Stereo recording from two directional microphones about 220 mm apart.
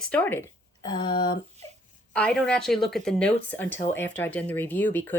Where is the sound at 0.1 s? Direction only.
5° left (ahead or behind).